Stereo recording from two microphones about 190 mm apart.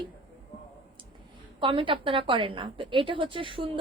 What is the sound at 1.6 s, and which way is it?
A woman's voice, 25° right (ahead or behind).